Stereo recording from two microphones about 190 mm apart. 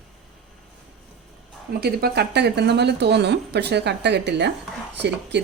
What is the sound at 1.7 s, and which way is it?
Speech, 55° right (ahead or behind).